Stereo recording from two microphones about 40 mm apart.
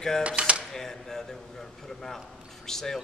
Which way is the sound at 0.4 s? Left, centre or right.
Right.